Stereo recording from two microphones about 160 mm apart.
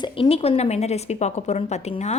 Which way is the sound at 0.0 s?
35° left (ahead or behind).